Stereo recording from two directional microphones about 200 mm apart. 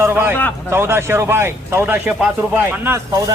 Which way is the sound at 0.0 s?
10° right (ahead or behind).